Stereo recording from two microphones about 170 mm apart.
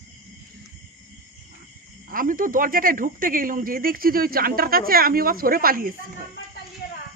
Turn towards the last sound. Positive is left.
turn(degrees=70)  # may be behind; listen again after turning